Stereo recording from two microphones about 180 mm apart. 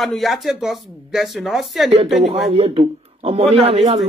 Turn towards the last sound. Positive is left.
turn(degrees=-35)  # may be behind; listen again after turning